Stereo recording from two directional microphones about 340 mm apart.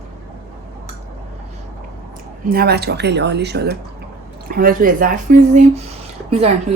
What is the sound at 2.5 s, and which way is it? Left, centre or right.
Speech, right.